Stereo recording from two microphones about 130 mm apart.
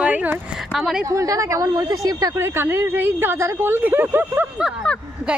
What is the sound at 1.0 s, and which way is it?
Speech, 25° right (ahead or behind).